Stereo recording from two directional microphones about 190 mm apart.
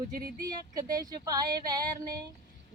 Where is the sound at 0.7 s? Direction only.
20° right (ahead or behind).